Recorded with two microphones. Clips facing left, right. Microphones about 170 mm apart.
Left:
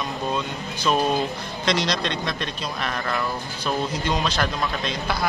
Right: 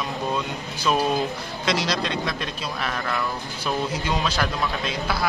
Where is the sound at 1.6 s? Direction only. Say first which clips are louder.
Left 1 dB; 5° right (ahead or behind).